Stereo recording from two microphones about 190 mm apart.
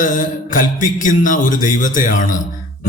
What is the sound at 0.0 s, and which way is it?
A man's voice, 45° left (ahead or behind).